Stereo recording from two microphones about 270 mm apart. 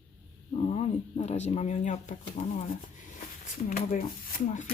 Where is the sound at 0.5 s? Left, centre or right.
Left.